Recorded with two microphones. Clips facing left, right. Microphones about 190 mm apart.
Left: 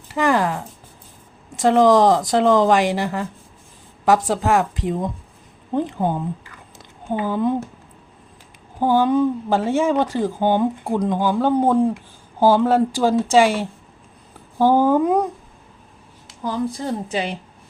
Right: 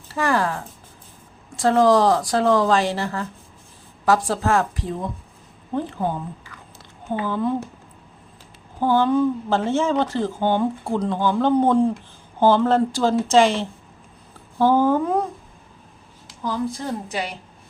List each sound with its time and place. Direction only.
0.1 s a sound: 20° left (ahead or behind)
1.5 s speech: 20° left (ahead or behind)
8.8 s speech: 15° left (ahead or behind)
16.4 s speech: 20° left (ahead or behind)